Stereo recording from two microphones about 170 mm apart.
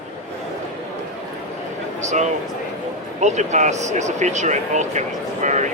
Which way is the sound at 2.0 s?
45° right (ahead or behind).